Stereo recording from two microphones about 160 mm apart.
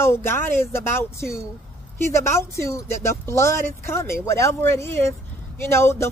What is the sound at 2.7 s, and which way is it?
Speech, 15° left (ahead or behind).